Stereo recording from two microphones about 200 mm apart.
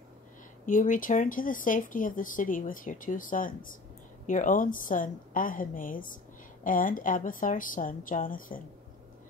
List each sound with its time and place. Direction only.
0.7 s a woman's voice: 40° left (ahead or behind)